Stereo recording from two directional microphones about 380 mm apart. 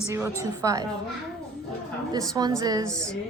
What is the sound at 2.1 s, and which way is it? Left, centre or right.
Speech, centre.